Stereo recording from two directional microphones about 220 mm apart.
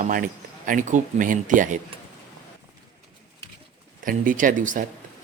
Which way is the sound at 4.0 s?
40° right (ahead or behind).